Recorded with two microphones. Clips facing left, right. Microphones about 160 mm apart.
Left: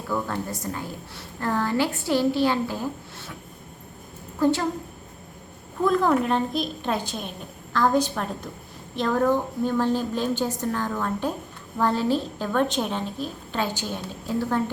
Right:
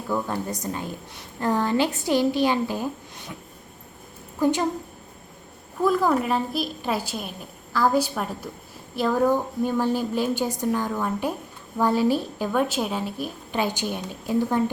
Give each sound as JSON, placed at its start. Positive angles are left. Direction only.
{"t": 0.1, "sound": "a woman's voice", "side_deg": -15}
{"t": 4.4, "sound": "a woman's voice", "side_deg": -15}
{"t": 5.8, "sound": "a woman's voice", "side_deg": -5}